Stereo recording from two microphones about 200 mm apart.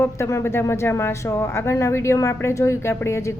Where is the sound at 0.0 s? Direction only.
15° left (ahead or behind).